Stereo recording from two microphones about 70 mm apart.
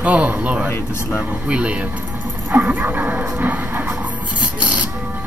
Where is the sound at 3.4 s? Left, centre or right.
Right.